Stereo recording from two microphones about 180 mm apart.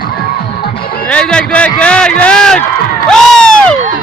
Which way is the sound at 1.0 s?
5° left (ahead or behind).